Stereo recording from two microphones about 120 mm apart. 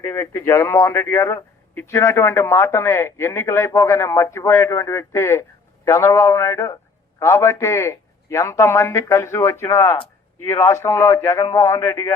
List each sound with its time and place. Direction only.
0.0 s a man's voice: 20° left (ahead or behind)